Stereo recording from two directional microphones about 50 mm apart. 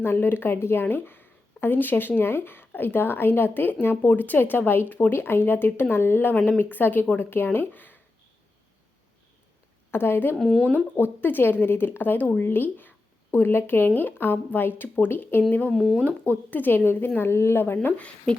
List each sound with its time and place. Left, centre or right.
0.0 s speech: left
9.9 s speech: left
10.3 s speech: centre
10.6 s speech: left
10.9 s speech: left
15.4 s speech: left
15.7 s speech: centre
16.5 s speech: left
17.2 s speech: left
17.8 s speech: left